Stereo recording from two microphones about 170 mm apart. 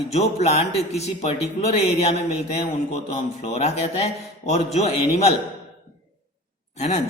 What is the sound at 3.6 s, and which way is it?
A man's voice, 40° left (ahead or behind).